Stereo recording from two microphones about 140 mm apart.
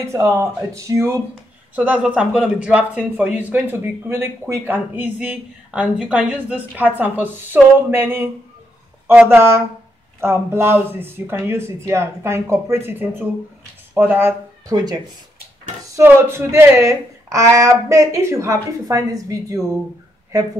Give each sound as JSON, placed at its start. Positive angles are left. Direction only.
{"t": 0.0, "sound": "speech", "side_deg": -20}
{"t": 1.8, "sound": "speech", "side_deg": -10}
{"t": 14.7, "sound": "speech", "side_deg": -25}